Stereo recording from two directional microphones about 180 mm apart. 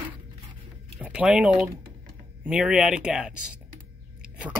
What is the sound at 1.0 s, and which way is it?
Speech, 5° right (ahead or behind).